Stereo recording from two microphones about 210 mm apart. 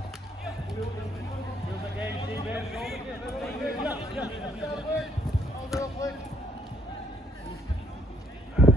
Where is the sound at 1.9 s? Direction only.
10° right (ahead or behind).